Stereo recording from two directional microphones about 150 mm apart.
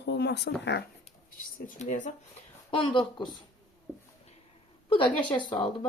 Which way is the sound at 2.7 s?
35° left (ahead or behind).